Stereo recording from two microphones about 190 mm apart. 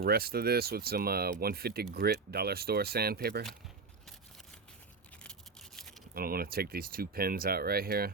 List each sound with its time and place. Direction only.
0.0 s speech: 55° right (ahead or behind)
5.2 s toothbrush: centre (ahead or behind)
6.1 s speech: 50° right (ahead or behind)